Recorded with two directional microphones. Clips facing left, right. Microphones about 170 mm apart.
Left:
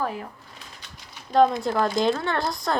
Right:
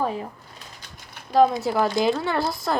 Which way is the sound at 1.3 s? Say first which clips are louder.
Right 1 dB; 5° right (ahead or behind).